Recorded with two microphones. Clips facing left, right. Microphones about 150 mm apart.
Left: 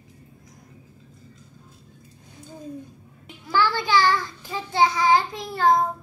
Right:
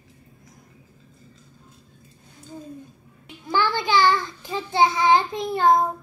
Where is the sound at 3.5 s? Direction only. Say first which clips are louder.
Even; 20° right (ahead or behind).